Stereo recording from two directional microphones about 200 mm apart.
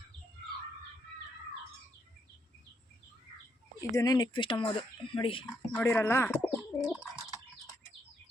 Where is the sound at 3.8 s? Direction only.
15° left (ahead or behind).